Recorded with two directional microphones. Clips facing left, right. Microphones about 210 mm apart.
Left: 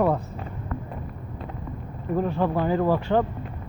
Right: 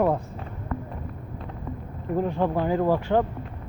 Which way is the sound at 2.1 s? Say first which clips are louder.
Even; 15° right (ahead or behind).